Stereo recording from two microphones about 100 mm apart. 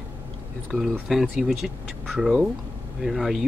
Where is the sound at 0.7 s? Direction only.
Centre (ahead or behind).